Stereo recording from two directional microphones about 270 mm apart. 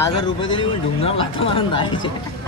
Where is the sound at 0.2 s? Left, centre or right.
Centre.